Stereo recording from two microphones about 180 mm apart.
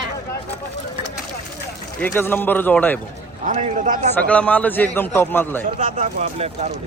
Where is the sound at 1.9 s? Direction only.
10° left (ahead or behind).